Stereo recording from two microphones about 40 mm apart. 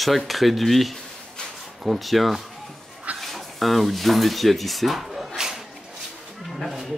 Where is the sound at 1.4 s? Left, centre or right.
Left.